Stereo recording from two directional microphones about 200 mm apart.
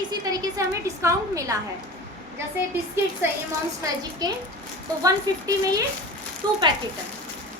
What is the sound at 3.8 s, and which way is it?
A woman's voice, 20° right (ahead or behind).